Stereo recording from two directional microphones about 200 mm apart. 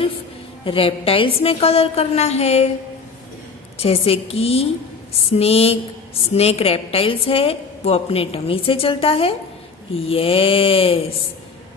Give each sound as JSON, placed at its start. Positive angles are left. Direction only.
{"t": 0.7, "sound": "a woman's voice", "side_deg": 25}
{"t": 3.7, "sound": "a woman's voice", "side_deg": 30}